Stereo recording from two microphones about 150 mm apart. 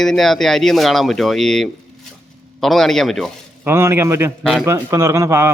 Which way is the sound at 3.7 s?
15° right (ahead or behind).